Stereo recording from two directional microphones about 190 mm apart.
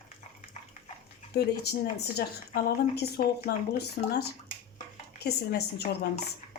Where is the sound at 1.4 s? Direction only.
55° left (ahead or behind).